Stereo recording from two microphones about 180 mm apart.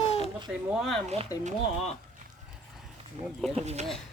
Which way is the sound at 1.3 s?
20° left (ahead or behind).